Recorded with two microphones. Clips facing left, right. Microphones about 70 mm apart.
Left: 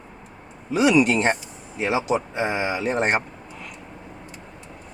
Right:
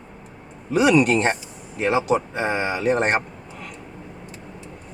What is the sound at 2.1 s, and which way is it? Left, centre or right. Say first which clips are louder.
Speech: right 1 dB; centre.